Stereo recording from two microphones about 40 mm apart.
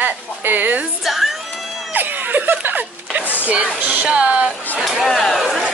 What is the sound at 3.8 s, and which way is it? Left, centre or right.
Speech, right.